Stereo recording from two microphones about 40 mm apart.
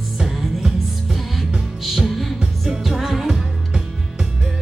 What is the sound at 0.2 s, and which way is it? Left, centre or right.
Music, centre.